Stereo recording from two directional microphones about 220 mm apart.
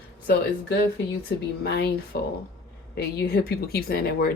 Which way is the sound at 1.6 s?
50° left (ahead or behind).